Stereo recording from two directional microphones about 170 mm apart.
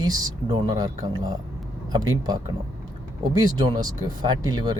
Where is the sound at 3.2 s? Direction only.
25° right (ahead or behind).